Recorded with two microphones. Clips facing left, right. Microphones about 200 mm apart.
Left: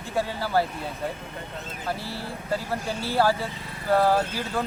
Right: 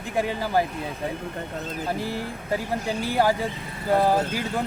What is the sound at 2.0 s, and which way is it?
Speech, 15° right (ahead or behind).